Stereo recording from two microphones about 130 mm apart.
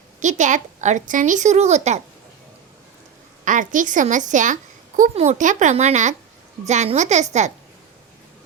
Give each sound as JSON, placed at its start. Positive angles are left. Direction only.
{"t": 0.2, "sound": "a woman's voice", "side_deg": -70}
{"t": 3.4, "sound": "a woman's voice", "side_deg": -80}
{"t": 5.1, "sound": "speech", "side_deg": -60}